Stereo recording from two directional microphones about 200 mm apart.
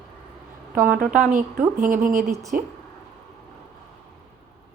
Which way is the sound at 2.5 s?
45° right (ahead or behind).